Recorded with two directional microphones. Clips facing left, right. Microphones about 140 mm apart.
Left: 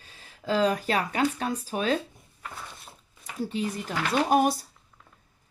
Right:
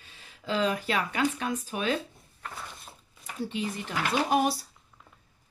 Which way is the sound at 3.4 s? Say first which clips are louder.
Left 3 dB; 40° left (ahead or behind).